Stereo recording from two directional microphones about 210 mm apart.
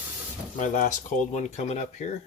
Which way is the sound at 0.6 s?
40° left (ahead or behind).